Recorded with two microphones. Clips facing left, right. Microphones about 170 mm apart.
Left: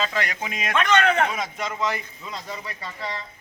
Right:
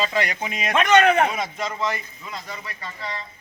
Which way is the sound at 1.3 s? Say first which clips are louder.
Right 1 dB; centre (ahead or behind).